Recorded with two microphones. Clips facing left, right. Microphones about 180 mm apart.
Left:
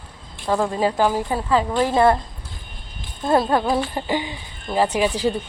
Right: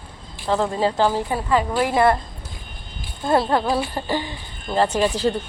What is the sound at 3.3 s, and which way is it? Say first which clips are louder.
Speech: left 1 dB; 20° left (ahead or behind).